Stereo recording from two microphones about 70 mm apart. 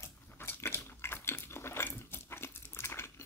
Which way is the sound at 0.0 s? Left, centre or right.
Left.